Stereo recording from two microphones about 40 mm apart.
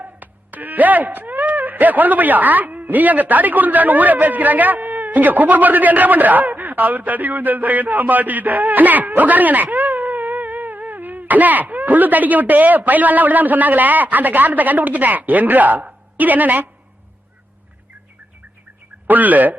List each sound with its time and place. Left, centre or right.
0.0 s a woman's voice: right
19.0 s speech: right